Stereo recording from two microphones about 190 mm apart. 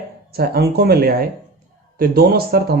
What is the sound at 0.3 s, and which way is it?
Speech, 55° right (ahead or behind).